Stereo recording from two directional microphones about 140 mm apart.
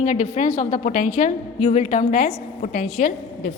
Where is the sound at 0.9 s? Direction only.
70° left (ahead or behind); by 3.1 s 90° left.